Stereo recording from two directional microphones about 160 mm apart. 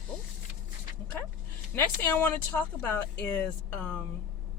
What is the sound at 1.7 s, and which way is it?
Speech, 15° left (ahead or behind).